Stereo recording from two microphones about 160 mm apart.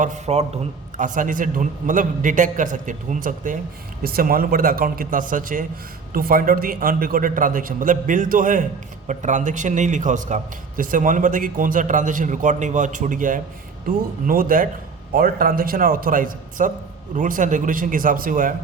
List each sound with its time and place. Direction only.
0.0 s a man's voice: 45° right (ahead or behind)